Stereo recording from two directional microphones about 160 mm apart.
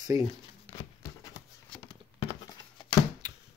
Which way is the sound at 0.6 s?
25° left (ahead or behind).